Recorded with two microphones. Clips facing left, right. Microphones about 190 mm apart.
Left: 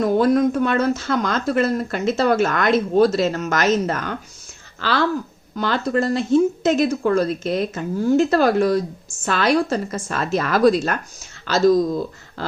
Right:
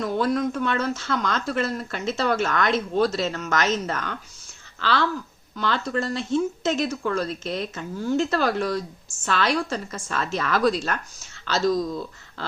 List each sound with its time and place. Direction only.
0.0 s speech: 45° left (ahead or behind)
6.6 s speech: 10° left (ahead or behind)
7.0 s speech: 45° left (ahead or behind)
7.3 s speech: 10° left (ahead or behind)
7.7 s speech: 45° left (ahead or behind)